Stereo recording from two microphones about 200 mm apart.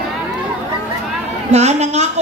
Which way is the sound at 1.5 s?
35° right (ahead or behind).